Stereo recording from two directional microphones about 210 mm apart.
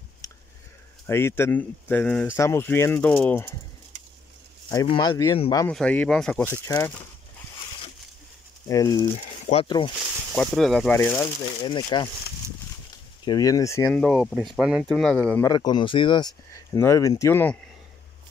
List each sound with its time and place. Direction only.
0.2 s a sound: 15° left (ahead or behind)
1.0 s speech: 10° left (ahead or behind)
4.7 s speech: 20° left (ahead or behind)
5.7 s speech: 5° left (ahead or behind)
8.6 s speech: 15° left (ahead or behind)
9.1 s speech: 30° left (ahead or behind)
10.3 s speech: 5° left (ahead or behind)
11.6 s speech: 20° left (ahead or behind)
13.2 s speech: 20° left (ahead or behind)
15.5 s speech: 20° left (ahead or behind)